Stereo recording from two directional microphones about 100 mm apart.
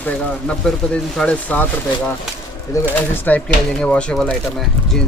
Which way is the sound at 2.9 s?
20° left (ahead or behind).